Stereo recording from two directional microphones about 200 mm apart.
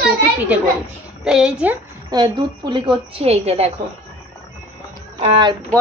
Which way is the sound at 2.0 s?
20° right (ahead or behind).